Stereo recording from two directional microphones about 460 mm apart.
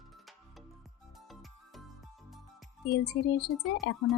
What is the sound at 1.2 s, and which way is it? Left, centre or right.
Music, centre.